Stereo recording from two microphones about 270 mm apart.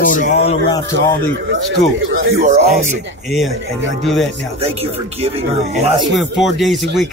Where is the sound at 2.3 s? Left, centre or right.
Right.